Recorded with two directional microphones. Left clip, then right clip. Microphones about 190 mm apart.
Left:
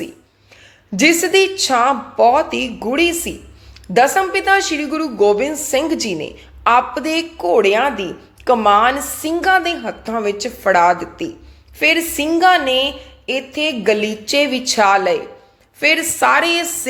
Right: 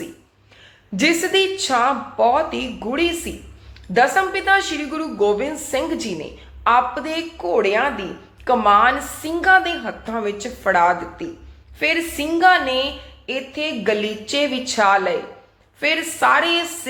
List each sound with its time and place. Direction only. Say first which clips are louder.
0.9 s a woman's voice: left 5 dB; 30° left (ahead or behind)